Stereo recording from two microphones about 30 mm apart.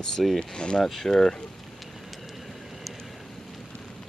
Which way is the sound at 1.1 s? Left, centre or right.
Centre.